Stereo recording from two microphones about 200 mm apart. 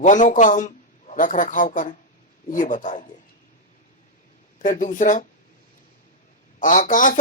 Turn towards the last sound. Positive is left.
turn(degrees=40)  # may be behind; listen again after turning